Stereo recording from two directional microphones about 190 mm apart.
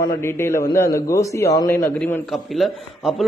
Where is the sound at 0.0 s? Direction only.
15° left (ahead or behind).